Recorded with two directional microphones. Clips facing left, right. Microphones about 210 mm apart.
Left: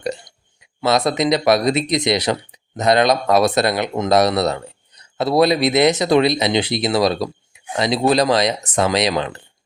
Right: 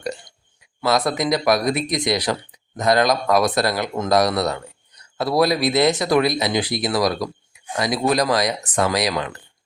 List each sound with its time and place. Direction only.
0.8 s speech: 25° left (ahead or behind)